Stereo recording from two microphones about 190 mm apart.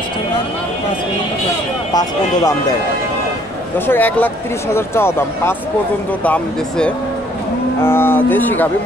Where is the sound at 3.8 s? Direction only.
10° left (ahead or behind).